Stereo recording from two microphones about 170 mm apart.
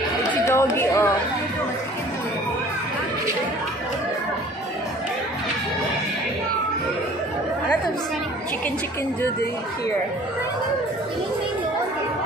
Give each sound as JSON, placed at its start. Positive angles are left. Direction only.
{"t": 0.5, "sound": "chatter", "side_deg": 15}